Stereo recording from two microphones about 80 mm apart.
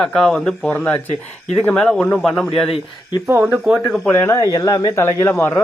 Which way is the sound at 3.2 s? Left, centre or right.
Right.